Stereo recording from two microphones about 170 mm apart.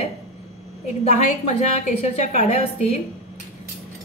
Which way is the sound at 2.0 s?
40° left (ahead or behind).